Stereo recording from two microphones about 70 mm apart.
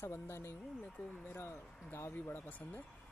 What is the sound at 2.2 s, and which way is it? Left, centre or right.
Speech, left.